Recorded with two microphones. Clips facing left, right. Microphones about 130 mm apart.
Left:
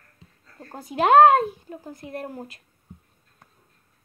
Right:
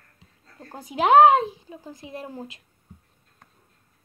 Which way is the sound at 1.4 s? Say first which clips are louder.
Left 1 dB; 50° left (ahead or behind).